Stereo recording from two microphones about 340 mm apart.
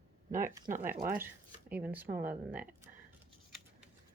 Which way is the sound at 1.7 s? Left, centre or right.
Centre.